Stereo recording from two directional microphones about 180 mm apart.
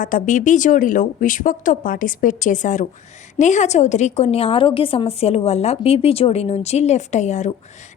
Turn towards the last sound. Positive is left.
turn(degrees=40)  # may be behind; listen again after turning